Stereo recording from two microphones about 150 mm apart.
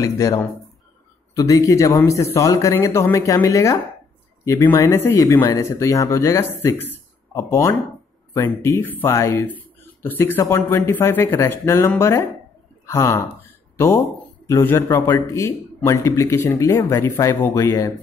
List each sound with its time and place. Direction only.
0.0 s a man's voice: 20° left (ahead or behind)